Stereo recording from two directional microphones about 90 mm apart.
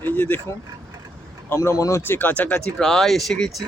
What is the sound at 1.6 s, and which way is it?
Speech, 40° left (ahead or behind).